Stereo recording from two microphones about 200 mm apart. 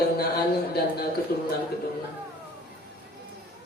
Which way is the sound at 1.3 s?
50° left (ahead or behind).